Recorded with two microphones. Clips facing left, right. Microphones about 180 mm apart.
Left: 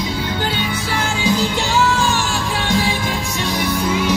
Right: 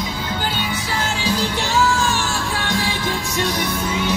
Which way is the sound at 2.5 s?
20° left (ahead or behind).